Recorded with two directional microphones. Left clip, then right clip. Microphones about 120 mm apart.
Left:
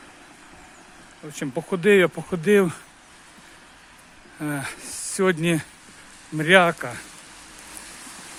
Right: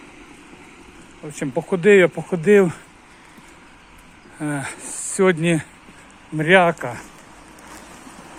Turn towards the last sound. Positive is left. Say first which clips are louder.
# right 2 dB
turn(degrees=50)  # may be behind; listen again after turning